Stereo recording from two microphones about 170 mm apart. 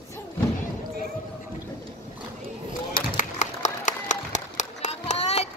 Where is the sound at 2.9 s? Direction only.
45° left (ahead or behind).